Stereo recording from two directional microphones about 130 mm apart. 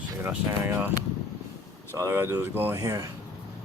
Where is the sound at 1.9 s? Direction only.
20° right (ahead or behind).